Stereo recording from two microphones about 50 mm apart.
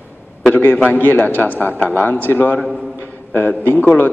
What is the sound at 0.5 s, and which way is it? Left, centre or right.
Speech, left.